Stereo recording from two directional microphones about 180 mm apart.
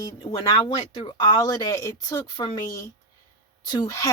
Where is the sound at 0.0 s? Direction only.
25° left (ahead or behind).